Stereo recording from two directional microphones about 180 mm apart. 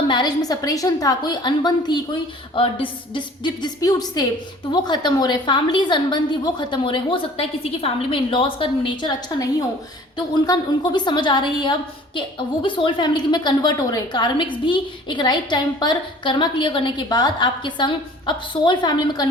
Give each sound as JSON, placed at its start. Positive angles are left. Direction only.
{"t": 0.1, "sound": "a woman's voice", "side_deg": 25}